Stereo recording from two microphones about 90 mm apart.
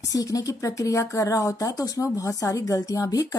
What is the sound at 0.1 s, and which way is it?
A woman's voice, 40° left (ahead or behind).